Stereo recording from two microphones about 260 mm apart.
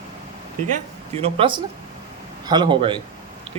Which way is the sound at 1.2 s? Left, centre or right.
Centre.